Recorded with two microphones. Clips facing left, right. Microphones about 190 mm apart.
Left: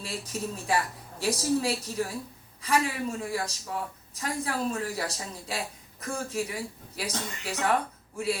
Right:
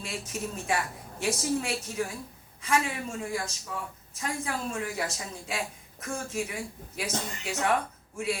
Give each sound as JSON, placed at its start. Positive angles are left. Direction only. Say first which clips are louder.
{"t": 0.0, "sound": "a woman's voice", "louder": "left 1 dB", "side_deg": 35}